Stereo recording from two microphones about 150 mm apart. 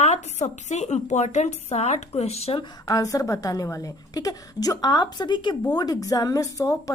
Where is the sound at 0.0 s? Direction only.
50° left (ahead or behind).